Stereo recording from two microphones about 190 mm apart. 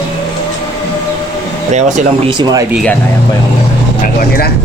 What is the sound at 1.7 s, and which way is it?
Speech, 40° right (ahead or behind).